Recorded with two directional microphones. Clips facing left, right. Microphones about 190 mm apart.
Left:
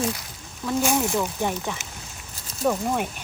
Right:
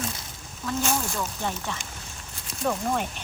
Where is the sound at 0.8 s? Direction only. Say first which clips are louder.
Left 6 dB; 15° left (ahead or behind).